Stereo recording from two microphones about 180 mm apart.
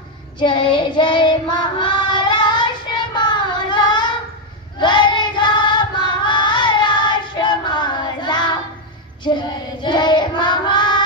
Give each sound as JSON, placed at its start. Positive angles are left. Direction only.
{"t": 0.4, "sound": "child singing", "side_deg": 25}